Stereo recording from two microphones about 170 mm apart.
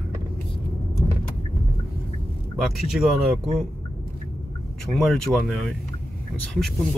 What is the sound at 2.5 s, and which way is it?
Speech, centre (ahead or behind).